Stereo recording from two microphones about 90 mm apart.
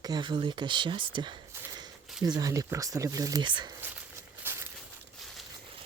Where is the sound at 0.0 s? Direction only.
55° right (ahead or behind).